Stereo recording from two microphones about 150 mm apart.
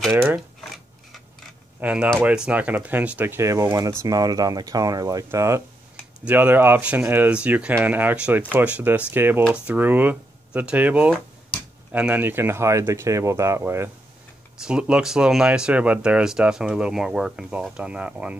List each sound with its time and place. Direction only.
0.1 s speech: 15° right (ahead or behind)
1.8 s speech: 10° right (ahead or behind)
14.6 s speech: 5° right (ahead or behind)